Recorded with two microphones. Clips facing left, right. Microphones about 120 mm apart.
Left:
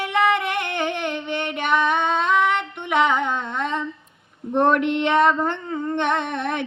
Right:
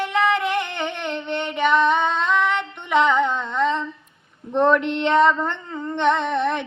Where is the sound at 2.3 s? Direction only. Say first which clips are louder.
Left 1 dB; 10° left (ahead or behind).